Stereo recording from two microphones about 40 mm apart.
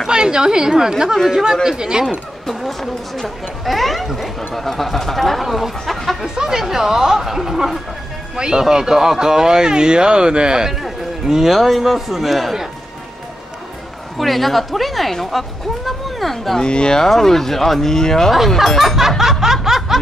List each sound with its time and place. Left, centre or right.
0.1 s speech: centre
2.4 s speech: centre
6.2 s speech: centre
10.7 s speech: centre
14.1 s speech: centre
16.5 s speech: left
17.1 s speech: centre
18.8 s speech: centre